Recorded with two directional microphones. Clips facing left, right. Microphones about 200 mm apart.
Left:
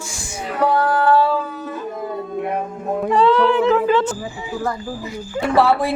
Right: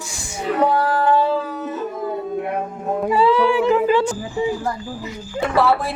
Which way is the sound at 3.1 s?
5° right (ahead or behind).